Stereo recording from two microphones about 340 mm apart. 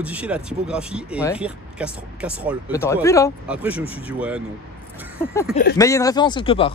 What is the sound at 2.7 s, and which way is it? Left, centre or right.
Speech, centre.